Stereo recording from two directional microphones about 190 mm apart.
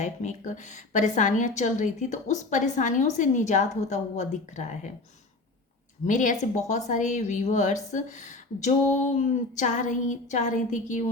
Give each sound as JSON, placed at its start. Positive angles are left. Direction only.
{"t": 0.0, "sound": "a woman's voice", "side_deg": 40}
{"t": 6.1, "sound": "a woman's voice", "side_deg": 40}